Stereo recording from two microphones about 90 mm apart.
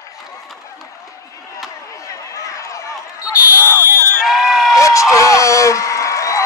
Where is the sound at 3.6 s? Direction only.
25° left (ahead or behind).